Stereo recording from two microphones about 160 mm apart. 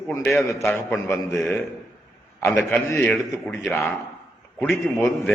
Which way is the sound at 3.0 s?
Centre (ahead or behind).